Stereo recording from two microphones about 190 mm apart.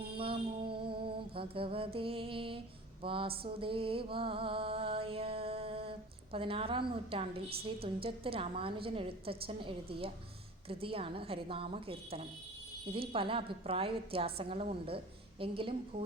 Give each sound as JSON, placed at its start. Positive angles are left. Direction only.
{"t": 0.0, "sound": "music", "side_deg": -30}